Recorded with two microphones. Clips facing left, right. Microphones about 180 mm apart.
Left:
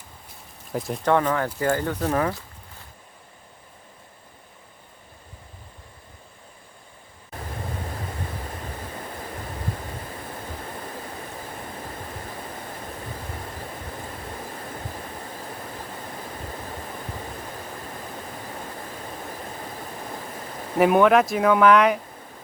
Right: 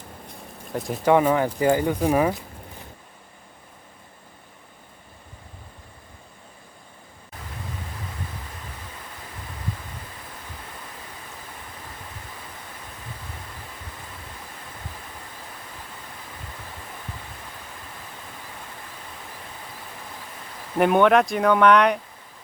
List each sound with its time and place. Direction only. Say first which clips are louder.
0.7 s speech: even; centre (ahead or behind)
1.0 s speech: right 4 dB; 10° right (ahead or behind)
20.7 s speech: left 1 dB; centre (ahead or behind)